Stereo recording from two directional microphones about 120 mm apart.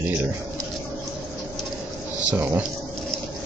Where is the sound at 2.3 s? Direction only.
15° right (ahead or behind).